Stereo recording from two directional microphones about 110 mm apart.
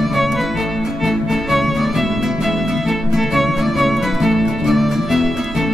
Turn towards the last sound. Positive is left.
turn(degrees=0)  # may be behind; listen again after turning